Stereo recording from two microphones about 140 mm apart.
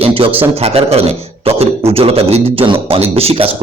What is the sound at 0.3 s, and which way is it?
A man's voice, 45° right (ahead or behind).